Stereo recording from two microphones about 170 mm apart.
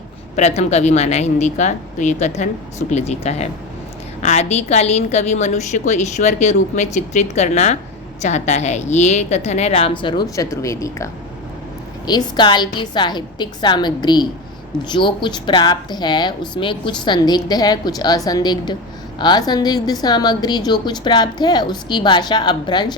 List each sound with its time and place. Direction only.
0.3 s a woman's voice: 40° left (ahead or behind)